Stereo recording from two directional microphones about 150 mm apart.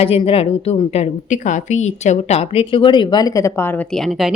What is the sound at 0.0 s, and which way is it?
A woman's voice, 40° left (ahead or behind).